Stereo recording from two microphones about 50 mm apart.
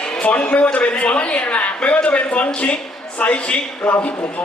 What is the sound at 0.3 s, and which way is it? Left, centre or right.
A man's voice, left.